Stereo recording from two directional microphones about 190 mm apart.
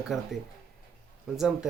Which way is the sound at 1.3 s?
Centre (ahead or behind).